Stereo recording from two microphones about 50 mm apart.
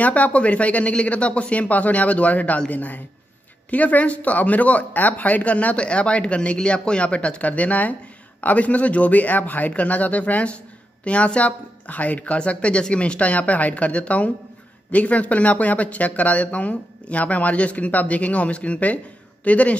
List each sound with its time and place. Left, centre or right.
0.0 s speech: left